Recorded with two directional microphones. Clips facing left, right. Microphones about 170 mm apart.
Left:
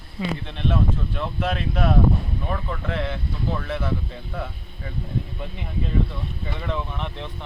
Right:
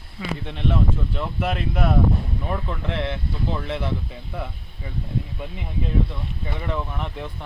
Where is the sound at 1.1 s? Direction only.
10° right (ahead or behind).